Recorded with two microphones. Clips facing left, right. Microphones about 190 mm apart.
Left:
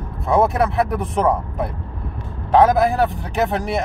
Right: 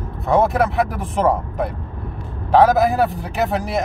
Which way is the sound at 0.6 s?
Centre (ahead or behind).